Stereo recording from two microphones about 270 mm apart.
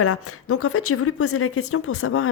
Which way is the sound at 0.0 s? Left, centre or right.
Left.